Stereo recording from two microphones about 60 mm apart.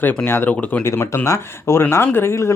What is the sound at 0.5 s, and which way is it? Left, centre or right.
Speech, left.